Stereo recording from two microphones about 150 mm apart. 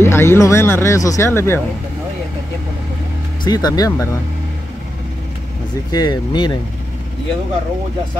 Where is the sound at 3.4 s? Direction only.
25° left (ahead or behind).